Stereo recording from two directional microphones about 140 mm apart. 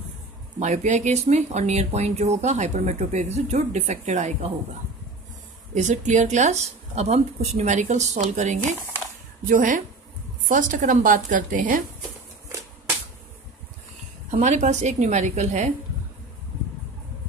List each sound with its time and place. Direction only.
0.6 s speech: 60° right (ahead or behind)
5.8 s speech: 60° right (ahead or behind)
9.5 s a woman's voice: 70° right (ahead or behind)
14.3 s speech: 55° right (ahead or behind)